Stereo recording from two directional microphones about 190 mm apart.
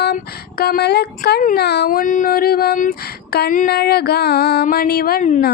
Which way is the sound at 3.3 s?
50° left (ahead or behind).